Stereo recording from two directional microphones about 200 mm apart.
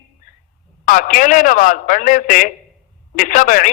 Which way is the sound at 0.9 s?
40° left (ahead or behind).